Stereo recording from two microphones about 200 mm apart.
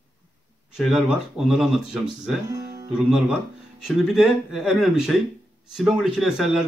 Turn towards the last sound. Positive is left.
turn(degrees=0)  # may be behind; listen again after turning